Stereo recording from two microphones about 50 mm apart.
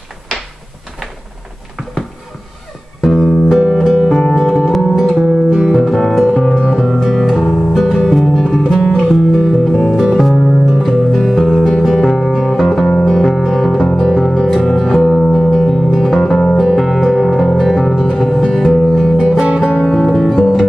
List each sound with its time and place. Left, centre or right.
3.0 s music: centre
4.1 s music: centre
5.7 s music: centre
6.6 s music: centre
13.1 s music: centre
15.3 s singing bowl: centre
16.0 s music: centre
19.1 s music: centre